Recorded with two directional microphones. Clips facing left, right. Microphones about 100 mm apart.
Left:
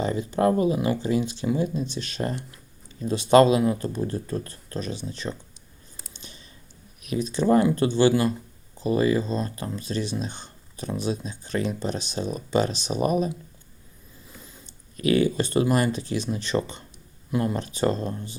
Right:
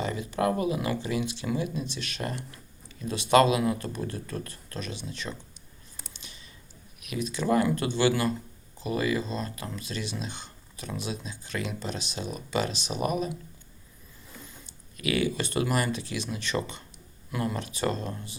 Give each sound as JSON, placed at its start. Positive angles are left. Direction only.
{"t": 0.0, "sound": "speech", "side_deg": 30}
{"t": 6.2, "sound": "a sound", "side_deg": 35}
{"t": 7.0, "sound": "speech", "side_deg": 35}
{"t": 14.9, "sound": "speech", "side_deg": 35}